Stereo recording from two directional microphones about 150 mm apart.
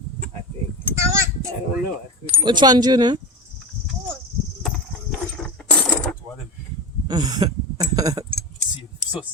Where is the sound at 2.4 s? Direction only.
30° right (ahead or behind).